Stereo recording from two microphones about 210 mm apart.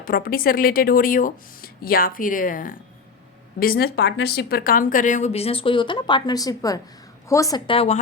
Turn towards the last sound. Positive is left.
turn(degrees=25)  # may be behind; listen again after turning